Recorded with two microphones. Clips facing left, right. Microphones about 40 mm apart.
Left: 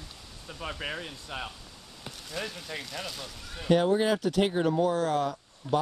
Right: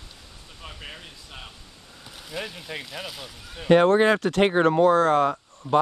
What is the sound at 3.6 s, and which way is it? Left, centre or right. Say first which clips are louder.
Speech: right 7 dB; right.